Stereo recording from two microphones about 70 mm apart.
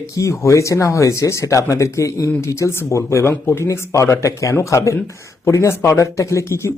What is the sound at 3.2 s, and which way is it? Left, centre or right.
Speech, left.